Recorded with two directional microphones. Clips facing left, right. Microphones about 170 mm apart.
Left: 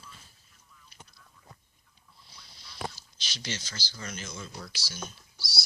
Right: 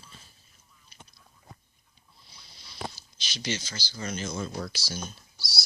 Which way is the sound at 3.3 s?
15° right (ahead or behind).